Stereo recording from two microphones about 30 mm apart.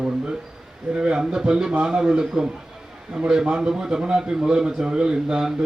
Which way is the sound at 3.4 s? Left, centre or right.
Right.